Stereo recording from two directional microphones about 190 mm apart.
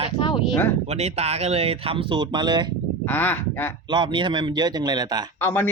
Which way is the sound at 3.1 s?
10° left (ahead or behind).